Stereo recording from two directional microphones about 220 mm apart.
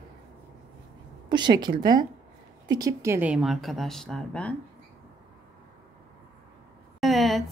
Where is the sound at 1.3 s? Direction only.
20° right (ahead or behind); by 4.6 s 5° left (ahead or behind).